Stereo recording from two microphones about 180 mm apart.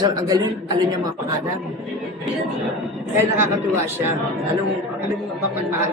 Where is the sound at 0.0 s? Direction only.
20° right (ahead or behind).